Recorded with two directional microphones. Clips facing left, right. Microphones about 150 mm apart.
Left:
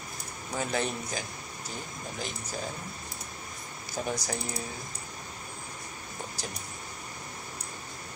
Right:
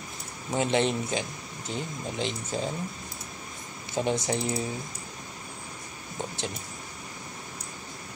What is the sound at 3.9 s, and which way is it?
Speech, 25° right (ahead or behind).